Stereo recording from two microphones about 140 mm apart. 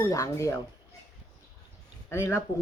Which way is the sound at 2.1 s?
20° left (ahead or behind).